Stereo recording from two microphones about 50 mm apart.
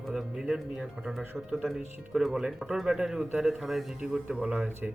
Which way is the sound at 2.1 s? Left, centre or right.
Centre.